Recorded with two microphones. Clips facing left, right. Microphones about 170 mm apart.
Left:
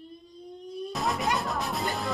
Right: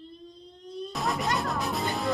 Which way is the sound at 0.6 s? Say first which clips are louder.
Left 1 dB; 10° left (ahead or behind).